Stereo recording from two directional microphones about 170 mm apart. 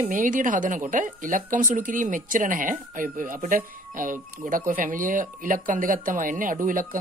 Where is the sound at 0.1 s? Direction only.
50° right (ahead or behind).